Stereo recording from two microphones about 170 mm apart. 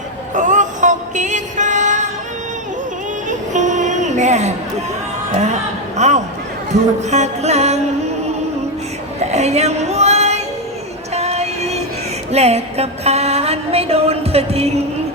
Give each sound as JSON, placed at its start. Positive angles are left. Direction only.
{"t": 0.3, "sound": "music", "side_deg": -45}
{"t": 3.2, "sound": "a sound", "side_deg": -45}
{"t": 5.3, "sound": "speech", "side_deg": -40}
{"t": 6.0, "sound": "a sound", "side_deg": -40}
{"t": 7.1, "sound": "music", "side_deg": -40}
{"t": 9.3, "sound": "music", "side_deg": -40}
{"t": 11.1, "sound": "female singing", "side_deg": -40}
{"t": 12.3, "sound": "music", "side_deg": -40}